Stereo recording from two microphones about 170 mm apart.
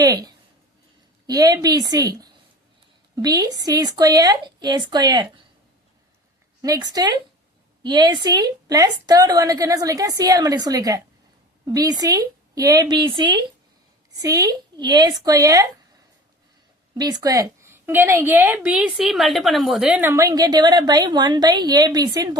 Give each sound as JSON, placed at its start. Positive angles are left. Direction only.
{"t": 0.0, "sound": "a woman's voice", "side_deg": -20}
{"t": 6.6, "sound": "a woman's voice", "side_deg": -20}
{"t": 16.9, "sound": "a woman's voice", "side_deg": -25}